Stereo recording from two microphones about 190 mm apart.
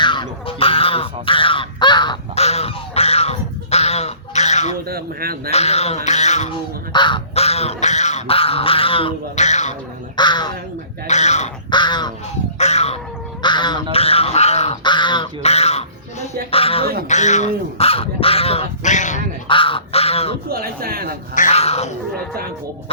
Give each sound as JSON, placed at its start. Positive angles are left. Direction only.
{"t": 0.0, "sound": "fowl", "side_deg": 25}
{"t": 4.9, "sound": "speech", "side_deg": -55}
{"t": 5.5, "sound": "crow", "side_deg": 35}
{"t": 6.9, "sound": "crow", "side_deg": 25}
{"t": 10.2, "sound": "crow", "side_deg": 25}
{"t": 11.0, "sound": "crow", "side_deg": 35}
{"t": 11.7, "sound": "crow", "side_deg": 25}
{"t": 12.5, "sound": "cat", "side_deg": 35}
{"t": 13.4, "sound": "duck", "side_deg": 25}
{"t": 13.9, "sound": "crow", "side_deg": 30}
{"t": 19.5, "sound": "goose", "side_deg": 30}
{"t": 20.5, "sound": "speech", "side_deg": -50}
{"t": 21.3, "sound": "cat", "side_deg": 35}